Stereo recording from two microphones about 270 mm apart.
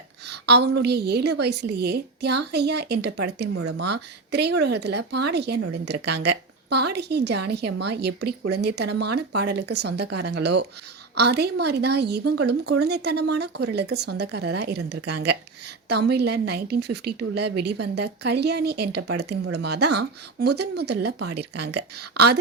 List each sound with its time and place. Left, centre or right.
0.3 s a woman's voice: right